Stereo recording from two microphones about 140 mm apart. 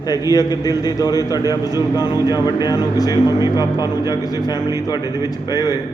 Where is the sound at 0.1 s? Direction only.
25° left (ahead or behind).